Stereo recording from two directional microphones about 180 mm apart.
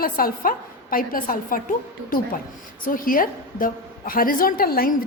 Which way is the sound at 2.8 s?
50° left (ahead or behind).